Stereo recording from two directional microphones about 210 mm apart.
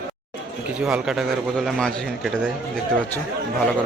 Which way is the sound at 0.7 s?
5° right (ahead or behind).